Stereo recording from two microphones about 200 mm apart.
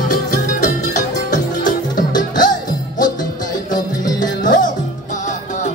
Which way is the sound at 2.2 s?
40° left (ahead or behind).